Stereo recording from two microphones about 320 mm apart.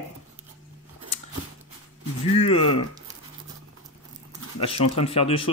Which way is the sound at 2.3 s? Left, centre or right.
Centre.